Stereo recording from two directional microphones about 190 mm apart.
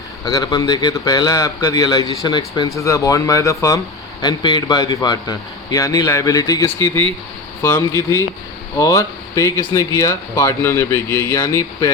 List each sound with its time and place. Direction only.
0.3 s speech: 20° left (ahead or behind)